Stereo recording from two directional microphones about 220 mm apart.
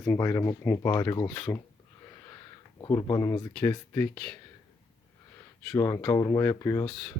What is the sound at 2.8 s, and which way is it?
Speech, 20° left (ahead or behind).